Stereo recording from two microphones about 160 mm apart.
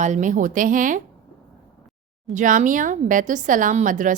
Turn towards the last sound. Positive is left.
turn(degrees=-55)  # may be behind; listen again after turning